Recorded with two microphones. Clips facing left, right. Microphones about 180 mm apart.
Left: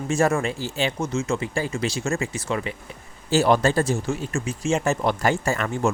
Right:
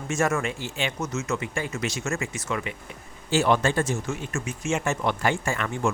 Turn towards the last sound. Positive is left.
turn(degrees=40)  # may be behind; listen again after turning